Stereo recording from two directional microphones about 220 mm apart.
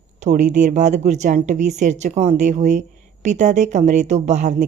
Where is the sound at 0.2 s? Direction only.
35° right (ahead or behind).